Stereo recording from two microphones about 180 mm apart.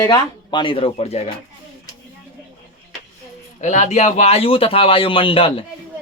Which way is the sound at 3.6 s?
40° left (ahead or behind).